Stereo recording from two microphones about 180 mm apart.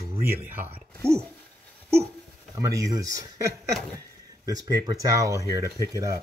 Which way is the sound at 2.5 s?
20° right (ahead or behind).